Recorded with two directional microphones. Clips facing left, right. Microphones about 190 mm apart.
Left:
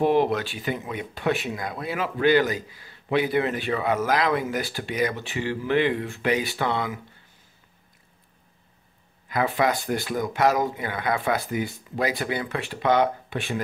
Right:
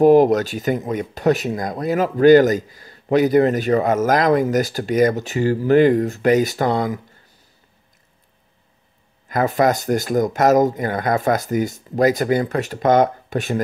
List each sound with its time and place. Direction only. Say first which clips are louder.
0.0 s speech: right 9 dB; 40° right (ahead or behind)
9.3 s speech: right 6 dB; 45° right (ahead or behind)